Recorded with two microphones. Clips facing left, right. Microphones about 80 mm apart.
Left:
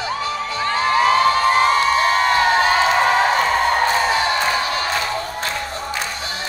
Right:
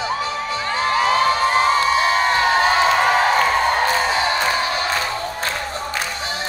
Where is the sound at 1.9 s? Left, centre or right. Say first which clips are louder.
Left 1 dB; left.